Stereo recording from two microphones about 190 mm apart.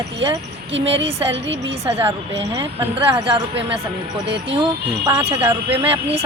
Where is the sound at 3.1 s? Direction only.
25° right (ahead or behind).